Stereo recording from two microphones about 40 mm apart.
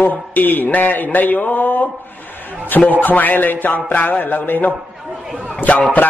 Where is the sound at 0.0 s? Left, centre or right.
Left.